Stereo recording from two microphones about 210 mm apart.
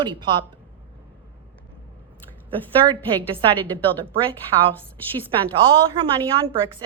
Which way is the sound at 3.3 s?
25° right (ahead or behind).